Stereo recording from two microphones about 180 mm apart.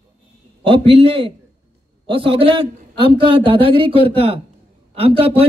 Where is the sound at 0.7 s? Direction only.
30° right (ahead or behind).